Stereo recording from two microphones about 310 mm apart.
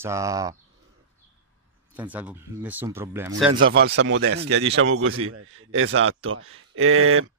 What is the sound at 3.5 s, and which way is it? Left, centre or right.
Speech, right.